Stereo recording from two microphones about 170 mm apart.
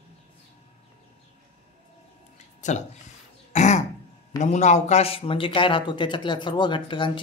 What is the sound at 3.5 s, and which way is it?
Throat clearing, 45° left (ahead or behind).